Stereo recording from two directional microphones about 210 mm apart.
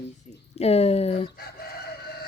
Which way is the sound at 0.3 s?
30° left (ahead or behind).